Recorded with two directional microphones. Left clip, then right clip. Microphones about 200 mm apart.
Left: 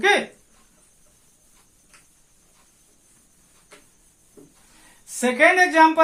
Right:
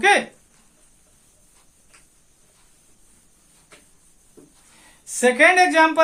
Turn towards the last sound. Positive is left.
turn(degrees=-45)  # may be behind; listen again after turning